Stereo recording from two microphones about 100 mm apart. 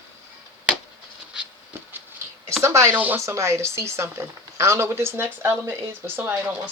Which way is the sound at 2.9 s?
15° right (ahead or behind).